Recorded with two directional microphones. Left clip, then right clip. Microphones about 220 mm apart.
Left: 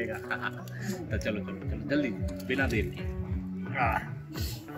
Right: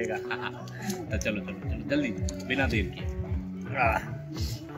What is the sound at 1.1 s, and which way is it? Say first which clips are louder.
Speech: right 1 dB; 10° left (ahead or behind).